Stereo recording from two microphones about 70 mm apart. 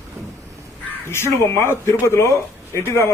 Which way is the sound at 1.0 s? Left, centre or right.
Left.